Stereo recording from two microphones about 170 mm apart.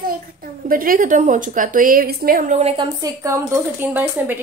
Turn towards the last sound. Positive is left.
turn(degrees=-10)  # may be behind; listen again after turning